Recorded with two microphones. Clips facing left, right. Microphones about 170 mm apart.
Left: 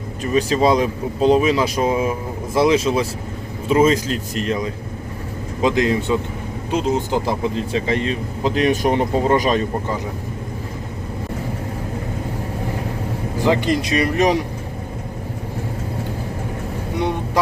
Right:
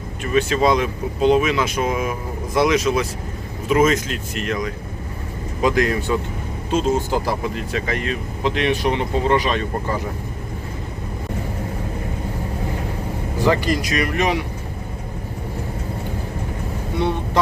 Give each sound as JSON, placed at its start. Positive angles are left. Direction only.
{"t": 0.2, "sound": "speech", "side_deg": 35}
{"t": 5.6, "sound": "speech", "side_deg": 20}
{"t": 13.4, "sound": "speech", "side_deg": 20}
{"t": 17.0, "sound": "speech", "side_deg": 15}